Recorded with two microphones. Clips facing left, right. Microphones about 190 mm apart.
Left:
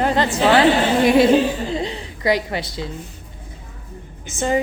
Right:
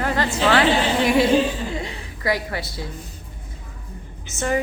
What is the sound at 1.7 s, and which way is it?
A woman's voice, 25° left (ahead or behind).